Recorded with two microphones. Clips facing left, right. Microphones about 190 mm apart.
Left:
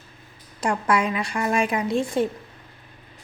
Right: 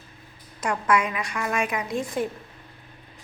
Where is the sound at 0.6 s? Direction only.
30° left (ahead or behind).